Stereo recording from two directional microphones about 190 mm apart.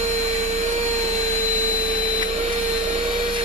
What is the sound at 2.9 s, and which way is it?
Vacuum cleaner, 25° right (ahead or behind).